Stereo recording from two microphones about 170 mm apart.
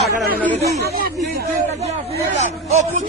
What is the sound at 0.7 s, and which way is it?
Chatter, 65° right (ahead or behind).